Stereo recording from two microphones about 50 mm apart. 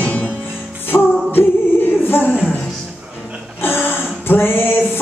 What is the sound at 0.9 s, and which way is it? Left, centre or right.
Music, left.